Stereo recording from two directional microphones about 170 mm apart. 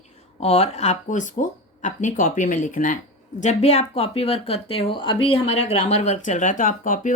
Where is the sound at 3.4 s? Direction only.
40° left (ahead or behind).